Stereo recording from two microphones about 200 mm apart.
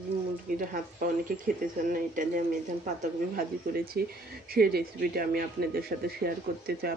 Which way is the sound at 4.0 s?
50° right (ahead or behind).